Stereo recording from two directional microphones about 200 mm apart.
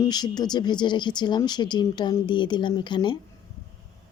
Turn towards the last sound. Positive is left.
turn(degrees=20)  # may be behind; listen again after turning